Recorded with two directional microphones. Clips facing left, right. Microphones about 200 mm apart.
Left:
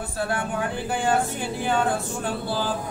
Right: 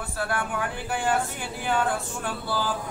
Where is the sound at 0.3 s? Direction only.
25° left (ahead or behind).